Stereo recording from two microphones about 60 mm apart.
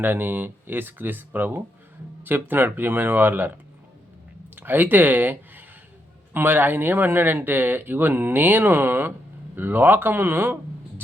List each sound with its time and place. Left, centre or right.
0.0 s speech: right